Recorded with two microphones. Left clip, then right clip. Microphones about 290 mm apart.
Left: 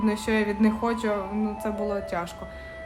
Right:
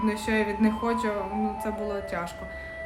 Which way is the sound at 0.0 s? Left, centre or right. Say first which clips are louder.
Left 1 dB; centre.